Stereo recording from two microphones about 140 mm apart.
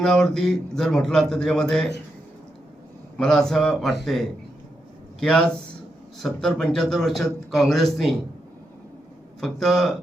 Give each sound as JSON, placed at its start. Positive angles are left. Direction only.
{"t": 0.0, "sound": "a man's voice", "side_deg": 5}
{"t": 3.2, "sound": "a man's voice", "side_deg": 5}
{"t": 9.4, "sound": "a man's voice", "side_deg": 5}